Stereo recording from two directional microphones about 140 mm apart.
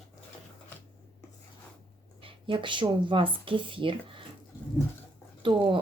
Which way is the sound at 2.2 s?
40° right (ahead or behind).